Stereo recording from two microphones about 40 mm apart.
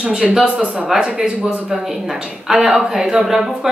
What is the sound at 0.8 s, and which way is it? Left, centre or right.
Speech, centre.